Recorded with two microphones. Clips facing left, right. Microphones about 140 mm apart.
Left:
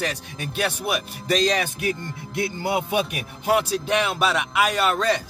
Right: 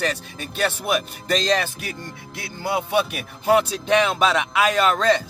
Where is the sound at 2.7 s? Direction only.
15° left (ahead or behind).